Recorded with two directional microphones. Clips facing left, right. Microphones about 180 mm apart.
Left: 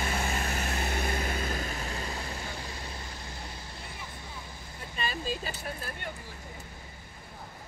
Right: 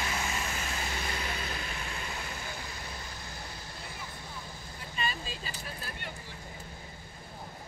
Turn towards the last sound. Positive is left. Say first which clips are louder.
# left 4 dB
turn(degrees=55)  # may be behind; listen again after turning